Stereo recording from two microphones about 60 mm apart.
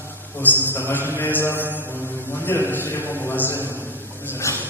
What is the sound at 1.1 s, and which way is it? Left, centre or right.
Mantra, left.